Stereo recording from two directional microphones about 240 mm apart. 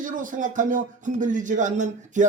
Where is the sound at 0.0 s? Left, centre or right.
Right.